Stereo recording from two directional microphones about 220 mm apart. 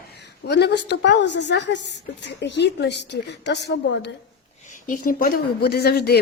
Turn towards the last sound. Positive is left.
turn(degrees=45)  # may be behind; listen again after turning